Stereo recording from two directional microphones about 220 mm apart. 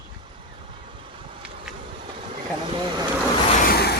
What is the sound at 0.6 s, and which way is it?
Vehicle, 25° right (ahead or behind).